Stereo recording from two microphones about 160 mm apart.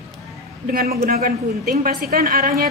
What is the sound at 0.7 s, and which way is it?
A woman's voice, 65° right (ahead or behind).